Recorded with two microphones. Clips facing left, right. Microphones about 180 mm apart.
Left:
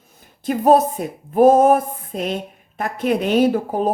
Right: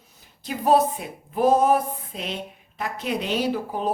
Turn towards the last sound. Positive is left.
turn(degrees=50)  # may be behind; listen again after turning